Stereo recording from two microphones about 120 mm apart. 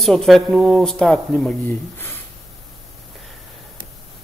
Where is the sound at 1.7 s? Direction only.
15° left (ahead or behind).